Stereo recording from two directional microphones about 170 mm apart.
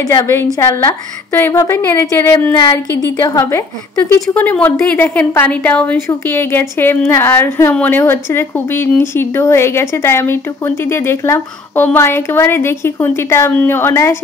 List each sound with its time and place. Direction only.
0.0 s a woman's voice: 20° left (ahead or behind)